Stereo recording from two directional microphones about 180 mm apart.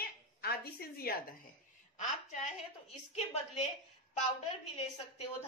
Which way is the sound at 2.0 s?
40° left (ahead or behind).